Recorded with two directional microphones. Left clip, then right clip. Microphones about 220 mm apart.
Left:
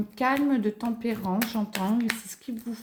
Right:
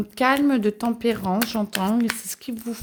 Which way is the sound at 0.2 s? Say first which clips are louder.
Right 5 dB; 55° right (ahead or behind).